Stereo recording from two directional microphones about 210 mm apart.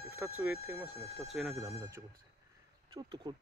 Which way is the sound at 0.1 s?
5° right (ahead or behind).